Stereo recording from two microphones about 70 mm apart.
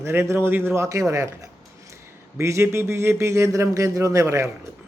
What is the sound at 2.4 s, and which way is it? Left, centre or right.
A man's voice, right.